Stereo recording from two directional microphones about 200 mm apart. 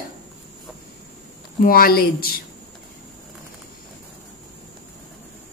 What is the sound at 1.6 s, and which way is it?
Speech, 45° left (ahead or behind).